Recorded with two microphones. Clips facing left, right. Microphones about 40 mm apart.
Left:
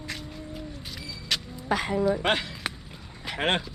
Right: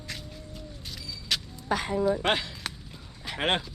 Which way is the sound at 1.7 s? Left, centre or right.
Left.